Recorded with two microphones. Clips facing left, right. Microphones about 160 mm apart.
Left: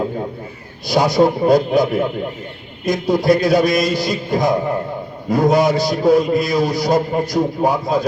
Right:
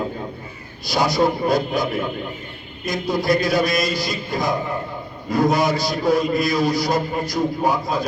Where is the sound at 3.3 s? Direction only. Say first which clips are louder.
Left 4 dB; 55° left (ahead or behind).